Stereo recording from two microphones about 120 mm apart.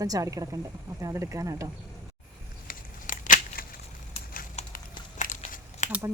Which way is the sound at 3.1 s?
90° left.